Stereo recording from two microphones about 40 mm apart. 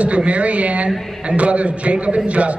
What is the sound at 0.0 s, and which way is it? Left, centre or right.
A man's voice, right.